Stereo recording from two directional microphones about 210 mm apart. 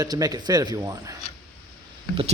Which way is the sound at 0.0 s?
15° right (ahead or behind).